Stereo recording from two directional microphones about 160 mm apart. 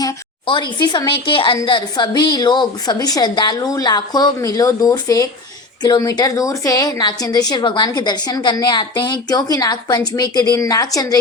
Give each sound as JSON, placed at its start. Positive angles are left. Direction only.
{"t": 0.0, "sound": "a woman's voice", "side_deg": 30}